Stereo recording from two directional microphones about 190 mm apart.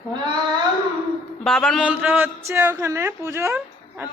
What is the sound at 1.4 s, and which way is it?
A man's voice, centre (ahead or behind).